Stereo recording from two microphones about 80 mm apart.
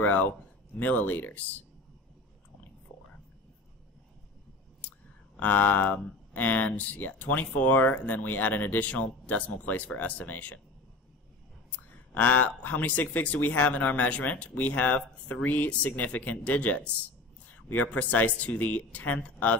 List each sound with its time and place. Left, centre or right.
0.0 s speech: left
5.4 s speech: left
11.9 s speech: centre